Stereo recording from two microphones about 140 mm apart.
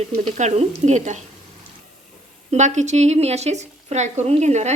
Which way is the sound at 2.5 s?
55° right (ahead or behind).